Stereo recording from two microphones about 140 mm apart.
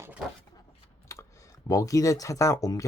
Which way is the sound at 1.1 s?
20° left (ahead or behind).